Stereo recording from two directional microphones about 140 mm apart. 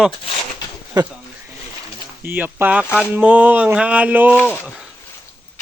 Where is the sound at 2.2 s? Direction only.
15° right (ahead or behind).